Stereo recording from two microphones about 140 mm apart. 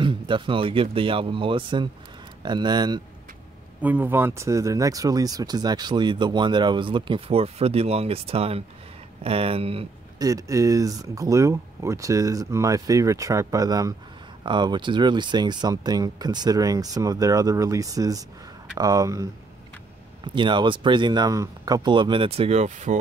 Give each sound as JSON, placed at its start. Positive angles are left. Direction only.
{"t": 0.0, "sound": "speech", "side_deg": -35}
{"t": 3.8, "sound": "speech", "side_deg": -15}
{"t": 10.1, "sound": "speech", "side_deg": -25}
{"t": 20.3, "sound": "speech", "side_deg": -35}